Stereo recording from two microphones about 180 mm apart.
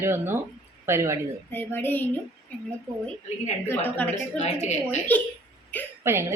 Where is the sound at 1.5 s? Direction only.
10° left (ahead or behind).